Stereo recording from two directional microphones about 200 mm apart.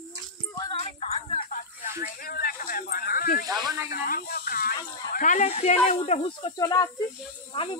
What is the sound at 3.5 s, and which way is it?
Speech, 20° right (ahead or behind).